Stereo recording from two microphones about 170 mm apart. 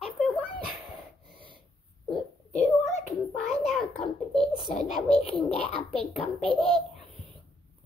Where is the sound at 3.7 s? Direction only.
Centre (ahead or behind).